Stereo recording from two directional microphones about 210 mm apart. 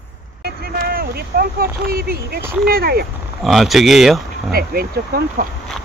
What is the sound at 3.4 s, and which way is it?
Speech, centre (ahead or behind).